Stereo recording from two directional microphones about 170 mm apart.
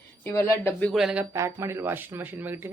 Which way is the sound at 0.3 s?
15° left (ahead or behind).